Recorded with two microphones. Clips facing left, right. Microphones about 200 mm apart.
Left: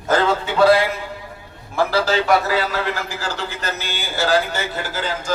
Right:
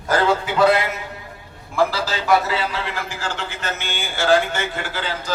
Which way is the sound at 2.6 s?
40° left (ahead or behind).